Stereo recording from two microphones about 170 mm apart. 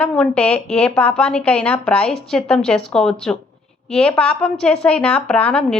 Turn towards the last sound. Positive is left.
turn(degrees=5)  # may be behind; listen again after turning